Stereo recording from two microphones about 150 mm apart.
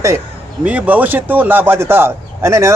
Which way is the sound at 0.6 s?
10° right (ahead or behind).